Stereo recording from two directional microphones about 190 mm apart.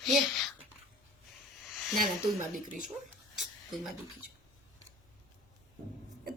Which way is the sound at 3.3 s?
Centre (ahead or behind).